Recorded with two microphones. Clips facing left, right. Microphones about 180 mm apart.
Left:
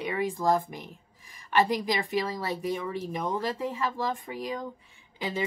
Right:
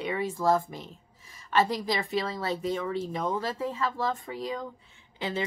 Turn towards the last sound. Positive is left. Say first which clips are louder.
# right 1 dB
turn(degrees=15)  # may be behind; listen again after turning